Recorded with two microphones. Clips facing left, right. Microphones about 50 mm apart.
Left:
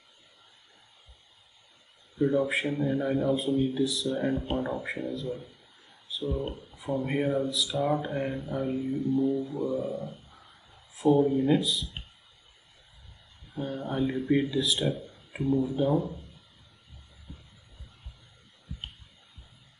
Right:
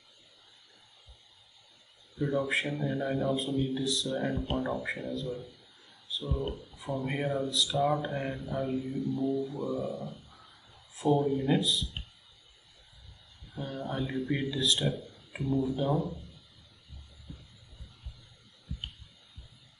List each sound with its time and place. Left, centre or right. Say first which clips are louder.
2.1 s a man's voice: left 4 dB; centre
7.0 s a man's voice: left 4 dB; centre
13.6 s a man's voice: left 5 dB; centre
15.4 s a man's voice: left 3 dB; centre
18.7 s a sound: even; left